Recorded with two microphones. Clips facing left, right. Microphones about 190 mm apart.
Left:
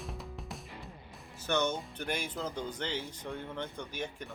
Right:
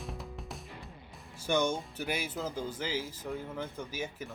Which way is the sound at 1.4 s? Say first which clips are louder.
Right 2 dB; 10° right (ahead or behind).